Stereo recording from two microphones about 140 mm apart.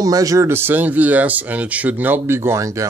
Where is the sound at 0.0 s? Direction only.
25° right (ahead or behind).